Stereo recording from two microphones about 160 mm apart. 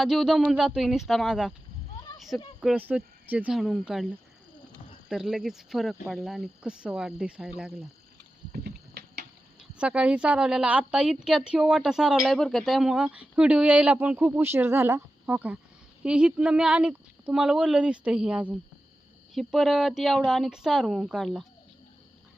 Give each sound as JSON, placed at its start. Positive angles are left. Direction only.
{"t": 0.0, "sound": "speech", "side_deg": 0}
{"t": 2.6, "sound": "speech", "side_deg": -5}
{"t": 5.0, "sound": "speech", "side_deg": 0}
{"t": 8.5, "sound": "a sound", "side_deg": -85}
{"t": 9.6, "sound": "a woman's voice", "side_deg": -5}